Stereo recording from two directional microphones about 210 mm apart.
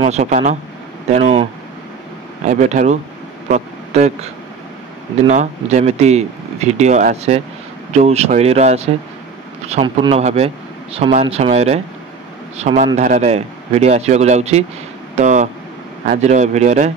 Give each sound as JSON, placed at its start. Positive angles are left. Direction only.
{"t": 0.0, "sound": "a man's voice", "side_deg": -30}